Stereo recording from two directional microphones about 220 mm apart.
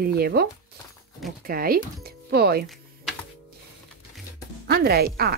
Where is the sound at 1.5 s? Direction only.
40° right (ahead or behind).